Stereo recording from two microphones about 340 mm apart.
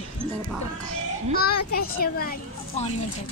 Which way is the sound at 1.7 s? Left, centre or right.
Left.